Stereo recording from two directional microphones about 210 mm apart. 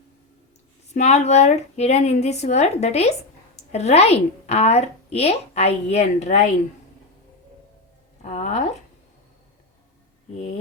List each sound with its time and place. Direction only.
0.9 s a woman's voice: 30° left (ahead or behind)
8.2 s speech: 35° left (ahead or behind)